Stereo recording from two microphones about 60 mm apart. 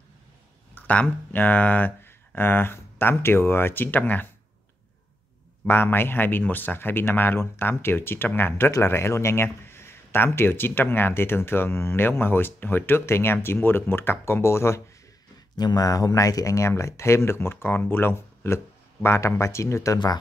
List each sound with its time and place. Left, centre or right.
0.7 s speech: left
5.7 s a man's voice: left
15.7 s speech: left